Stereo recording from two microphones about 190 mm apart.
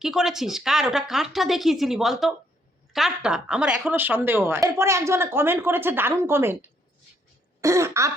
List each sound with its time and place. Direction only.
0.0 s speech: centre (ahead or behind)